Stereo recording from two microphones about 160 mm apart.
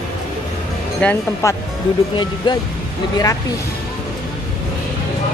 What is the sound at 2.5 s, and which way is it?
Speech, 30° left (ahead or behind).